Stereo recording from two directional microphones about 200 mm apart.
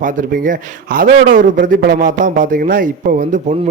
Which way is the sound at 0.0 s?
40° right (ahead or behind).